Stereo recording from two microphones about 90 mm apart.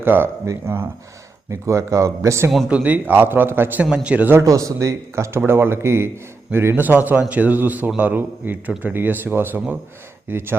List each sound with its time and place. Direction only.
0.0 s a man's voice: 25° right (ahead or behind)
2.6 s a man's voice: 15° right (ahead or behind)
4.4 s a man's voice: 40° right (ahead or behind)